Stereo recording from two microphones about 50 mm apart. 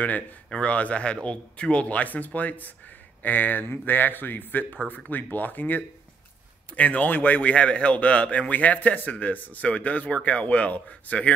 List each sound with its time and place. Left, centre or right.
0.5 s speech: left